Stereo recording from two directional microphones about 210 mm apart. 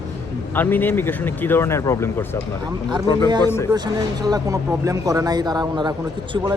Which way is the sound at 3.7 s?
20° right (ahead or behind).